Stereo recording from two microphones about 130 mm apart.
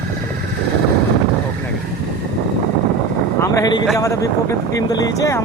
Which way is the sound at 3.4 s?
25° left (ahead or behind).